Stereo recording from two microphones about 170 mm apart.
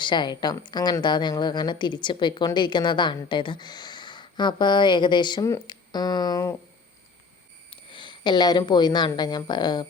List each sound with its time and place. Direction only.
0.0 s a woman's voice: 25° left (ahead or behind)
7.7 s speech: 30° left (ahead or behind)